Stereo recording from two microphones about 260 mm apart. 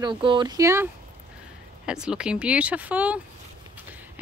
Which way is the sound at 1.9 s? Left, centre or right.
Centre.